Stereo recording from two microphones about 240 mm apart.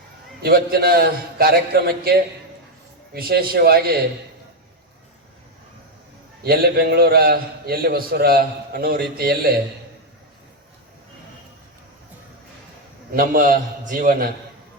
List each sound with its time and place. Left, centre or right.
0.4 s a man's voice: right
6.4 s a man's voice: right
13.1 s a man's voice: right